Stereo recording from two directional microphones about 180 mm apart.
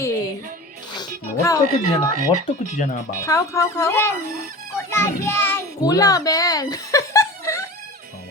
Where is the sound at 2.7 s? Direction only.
45° left (ahead or behind).